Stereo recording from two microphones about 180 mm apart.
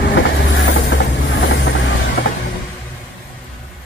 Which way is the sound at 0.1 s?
90° left.